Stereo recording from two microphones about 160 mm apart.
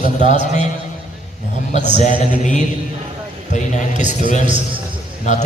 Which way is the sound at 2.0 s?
50° left (ahead or behind).